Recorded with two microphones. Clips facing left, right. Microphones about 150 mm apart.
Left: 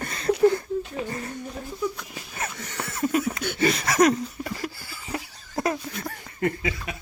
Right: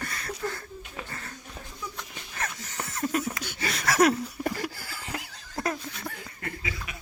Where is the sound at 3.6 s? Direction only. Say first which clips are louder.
Left 3 dB; centre (ahead or behind).